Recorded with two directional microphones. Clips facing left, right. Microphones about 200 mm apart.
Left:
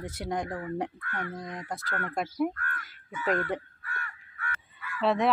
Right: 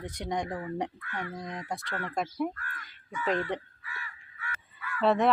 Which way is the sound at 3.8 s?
55° left (ahead or behind).